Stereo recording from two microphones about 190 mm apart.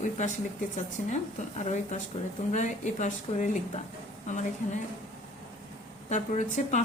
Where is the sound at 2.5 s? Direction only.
40° left (ahead or behind).